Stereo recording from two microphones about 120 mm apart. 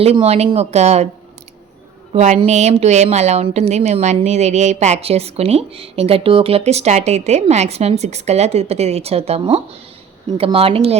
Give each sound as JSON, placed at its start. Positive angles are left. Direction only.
{"t": 0.0, "sound": "speech", "side_deg": -55}
{"t": 2.1, "sound": "a woman's voice", "side_deg": -75}